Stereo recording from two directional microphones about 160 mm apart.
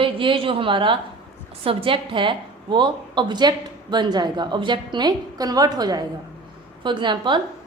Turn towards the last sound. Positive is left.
turn(degrees=-30)  # may be behind; listen again after turning